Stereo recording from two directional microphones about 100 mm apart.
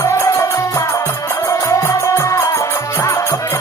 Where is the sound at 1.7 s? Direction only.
25° left (ahead or behind).